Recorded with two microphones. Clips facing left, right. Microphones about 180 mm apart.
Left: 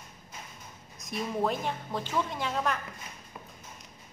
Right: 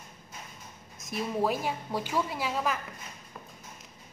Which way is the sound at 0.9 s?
Centre (ahead or behind).